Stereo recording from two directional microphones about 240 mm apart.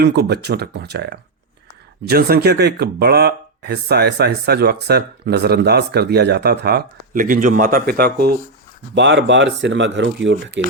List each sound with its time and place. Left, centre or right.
0.0 s speech: right